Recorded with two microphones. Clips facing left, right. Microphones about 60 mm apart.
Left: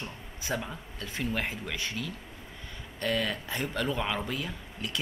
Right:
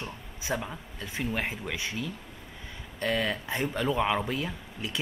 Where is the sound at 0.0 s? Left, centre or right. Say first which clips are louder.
Right 1 dB; right.